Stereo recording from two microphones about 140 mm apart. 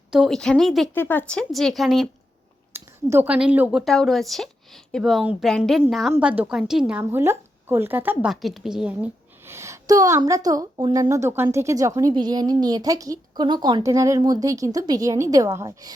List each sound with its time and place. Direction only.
0.1 s a woman's voice: centre (ahead or behind)
0.9 s a woman's voice: 15° left (ahead or behind)
2.7 s a woman's voice: 15° right (ahead or behind)
7.0 s speech: 20° right (ahead or behind)
8.3 s a woman's voice: centre (ahead or behind)
9.5 s speech: 20° right (ahead or behind)
11.1 s speech: 20° right (ahead or behind)